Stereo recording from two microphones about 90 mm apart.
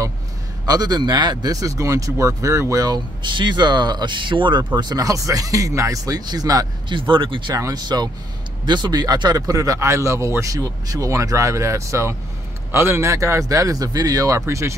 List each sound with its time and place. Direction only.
0.7 s speech: 50° right (ahead or behind)
4.7 s speech: 45° right (ahead or behind)
6.9 s speech: 65° right (ahead or behind)
7.5 s speech: 45° right (ahead or behind)